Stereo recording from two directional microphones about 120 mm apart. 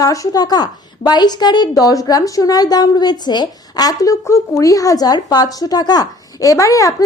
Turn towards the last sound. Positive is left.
turn(degrees=25)  # may be behind; listen again after turning